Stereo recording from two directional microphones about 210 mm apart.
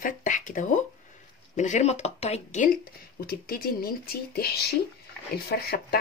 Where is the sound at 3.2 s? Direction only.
45° left (ahead or behind).